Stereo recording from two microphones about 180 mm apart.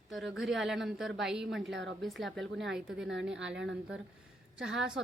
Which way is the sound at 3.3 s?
90° right.